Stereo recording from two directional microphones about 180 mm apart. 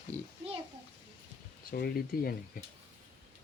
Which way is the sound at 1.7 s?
60° left (ahead or behind).